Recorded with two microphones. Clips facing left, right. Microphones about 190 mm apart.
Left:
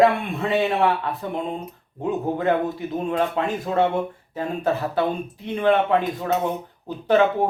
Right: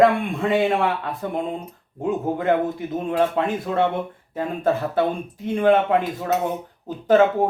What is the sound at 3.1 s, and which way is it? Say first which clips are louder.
Speech: right 3 dB; 50° right (ahead or behind).